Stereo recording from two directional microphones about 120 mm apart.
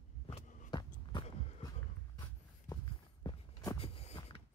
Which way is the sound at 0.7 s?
35° left (ahead or behind).